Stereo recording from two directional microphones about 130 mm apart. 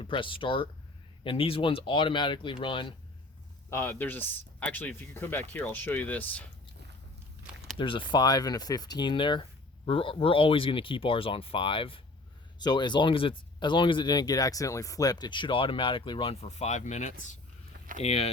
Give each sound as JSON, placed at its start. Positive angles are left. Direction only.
{"t": 0.0, "sound": "speech", "side_deg": 40}
{"t": 3.7, "sound": "speech", "side_deg": 15}
{"t": 7.8, "sound": "speech", "side_deg": 40}
{"t": 17.9, "sound": "speech", "side_deg": 55}